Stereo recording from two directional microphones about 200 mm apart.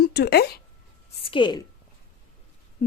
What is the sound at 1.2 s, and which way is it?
Speech, 25° left (ahead or behind).